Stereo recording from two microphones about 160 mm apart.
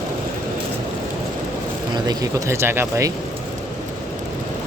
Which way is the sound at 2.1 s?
15° right (ahead or behind).